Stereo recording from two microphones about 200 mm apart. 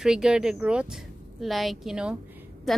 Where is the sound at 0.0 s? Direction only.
5° right (ahead or behind).